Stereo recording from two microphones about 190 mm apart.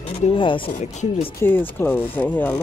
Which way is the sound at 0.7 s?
40° left (ahead or behind).